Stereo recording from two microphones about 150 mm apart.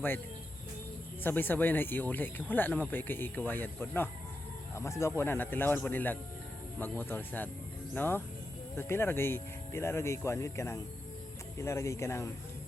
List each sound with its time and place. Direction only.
1.2 s speech: 15° left (ahead or behind)